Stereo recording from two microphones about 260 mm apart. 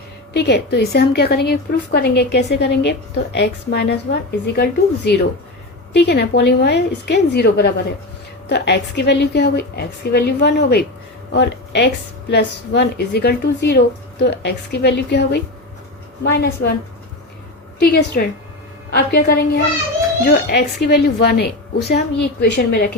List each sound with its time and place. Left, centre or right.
0.3 s a woman's voice: left
17.7 s a woman's voice: left